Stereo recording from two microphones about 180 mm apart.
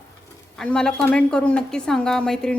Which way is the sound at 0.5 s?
5° left (ahead or behind).